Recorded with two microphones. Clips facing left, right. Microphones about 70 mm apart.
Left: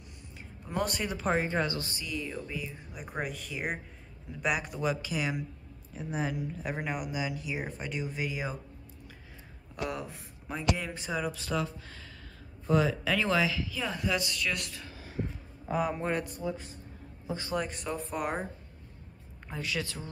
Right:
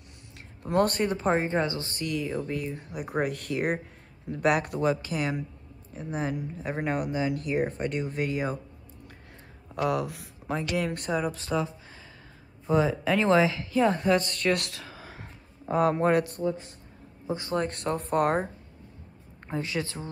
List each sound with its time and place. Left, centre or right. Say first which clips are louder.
0.7 s speech: right 8 dB; right
2.0 s speech: right 7 dB; right
2.7 s speech: right 8 dB; centre
3.2 s speech: right 8 dB; right
7.2 s speech: right 7 dB; right
9.8 s speech: right 8 dB; right
10.8 s speech: right 8 dB; right
11.1 s speech: right 5 dB; right
11.5 s a woman's voice: right 4 dB; right
14.7 s a sound: right 2 dB; right
15.8 s speech: right 9 dB; right
17.3 s speech: right 4 dB; right
17.6 s speech: right 6 dB; right
19.4 s a woman's voice: right 4 dB; right